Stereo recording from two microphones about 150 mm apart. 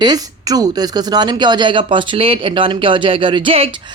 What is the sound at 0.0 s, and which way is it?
A woman's voice, 25° right (ahead or behind).